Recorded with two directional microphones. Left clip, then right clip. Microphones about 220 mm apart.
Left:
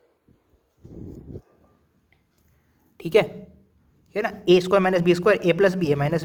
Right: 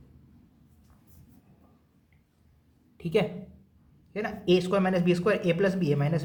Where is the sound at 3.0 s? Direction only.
45° left (ahead or behind).